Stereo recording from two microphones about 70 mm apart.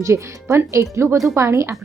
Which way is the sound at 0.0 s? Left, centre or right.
Right.